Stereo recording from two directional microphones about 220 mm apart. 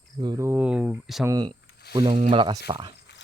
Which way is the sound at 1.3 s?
20° right (ahead or behind).